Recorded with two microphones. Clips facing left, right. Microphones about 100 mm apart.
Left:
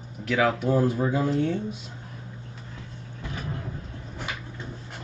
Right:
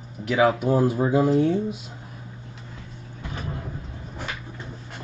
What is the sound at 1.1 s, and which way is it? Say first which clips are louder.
Speech: right 5 dB; 35° right (ahead or behind).